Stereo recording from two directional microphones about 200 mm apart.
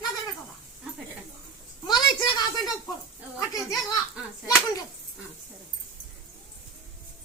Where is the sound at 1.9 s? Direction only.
20° left (ahead or behind).